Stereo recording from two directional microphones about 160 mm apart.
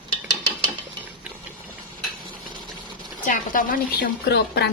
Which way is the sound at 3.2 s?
55° left (ahead or behind).